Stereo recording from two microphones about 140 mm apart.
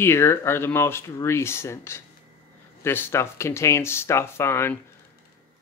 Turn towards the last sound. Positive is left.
turn(degrees=15)  # may be behind; listen again after turning